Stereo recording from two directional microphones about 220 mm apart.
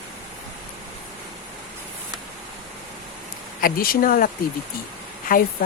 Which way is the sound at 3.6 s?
40° left (ahead or behind).